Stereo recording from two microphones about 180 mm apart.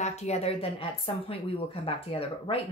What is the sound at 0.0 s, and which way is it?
A woman's voice, 40° left (ahead or behind).